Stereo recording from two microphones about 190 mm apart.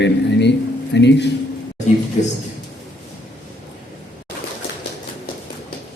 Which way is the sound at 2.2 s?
40° left (ahead or behind).